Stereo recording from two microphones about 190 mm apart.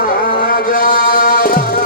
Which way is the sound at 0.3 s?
45° left (ahead or behind).